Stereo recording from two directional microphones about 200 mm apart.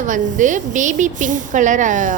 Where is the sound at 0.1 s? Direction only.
40° right (ahead or behind).